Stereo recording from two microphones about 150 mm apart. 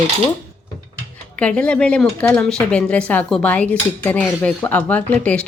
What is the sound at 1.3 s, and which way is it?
Speech, 5° left (ahead or behind).